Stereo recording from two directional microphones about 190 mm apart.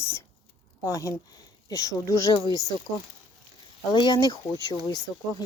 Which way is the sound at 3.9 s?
25° left (ahead or behind).